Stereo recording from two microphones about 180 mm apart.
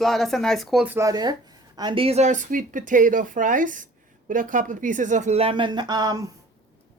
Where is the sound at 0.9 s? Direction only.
20° right (ahead or behind).